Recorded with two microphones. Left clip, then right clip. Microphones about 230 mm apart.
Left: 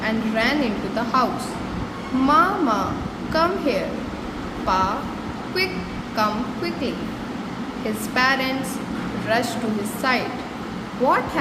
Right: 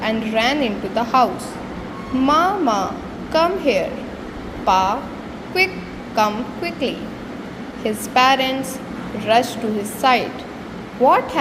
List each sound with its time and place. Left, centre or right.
0.0 s speech: centre
8.1 s a woman's voice: centre